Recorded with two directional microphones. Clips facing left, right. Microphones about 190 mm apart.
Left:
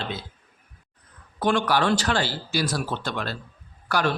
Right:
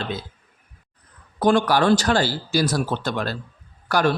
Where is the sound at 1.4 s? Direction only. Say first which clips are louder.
Right 4 dB; 40° right (ahead or behind).